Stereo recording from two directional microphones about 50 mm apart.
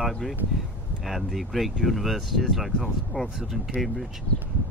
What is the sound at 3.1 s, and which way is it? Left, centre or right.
Speech, left.